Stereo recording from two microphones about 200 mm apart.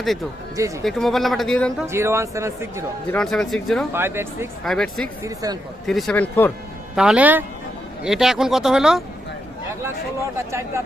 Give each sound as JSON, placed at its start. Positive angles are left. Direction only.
{"t": 0.9, "sound": "speech", "side_deg": 0}
{"t": 1.9, "sound": "speech", "side_deg": -15}
{"t": 3.1, "sound": "speech", "side_deg": 5}
{"t": 3.9, "sound": "speech", "side_deg": -10}
{"t": 4.6, "sound": "speech", "side_deg": 0}
{"t": 5.2, "sound": "speech", "side_deg": -15}
{"t": 5.8, "sound": "speech", "side_deg": 0}
{"t": 6.9, "sound": "speech", "side_deg": -5}
{"t": 10.3, "sound": "speech", "side_deg": -15}